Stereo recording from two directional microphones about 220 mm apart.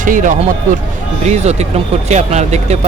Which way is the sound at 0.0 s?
35° right (ahead or behind).